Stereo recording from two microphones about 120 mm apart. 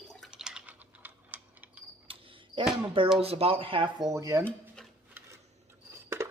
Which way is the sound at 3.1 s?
55° right (ahead or behind).